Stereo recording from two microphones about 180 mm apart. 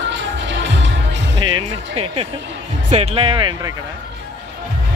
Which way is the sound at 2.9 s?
35° right (ahead or behind).